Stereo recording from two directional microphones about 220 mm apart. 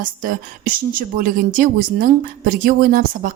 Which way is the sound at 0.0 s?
40° right (ahead or behind).